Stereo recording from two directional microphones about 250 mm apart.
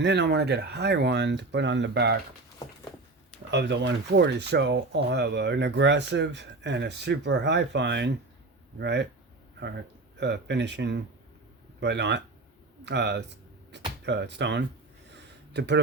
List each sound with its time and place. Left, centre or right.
0.0 s speech: right
3.5 s speech: right
10.2 s speech: right
13.7 s a sound: right